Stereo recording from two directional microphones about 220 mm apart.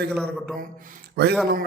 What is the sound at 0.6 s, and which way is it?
Speech, 40° right (ahead or behind).